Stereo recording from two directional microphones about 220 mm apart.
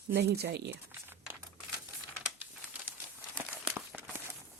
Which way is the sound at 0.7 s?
10° right (ahead or behind).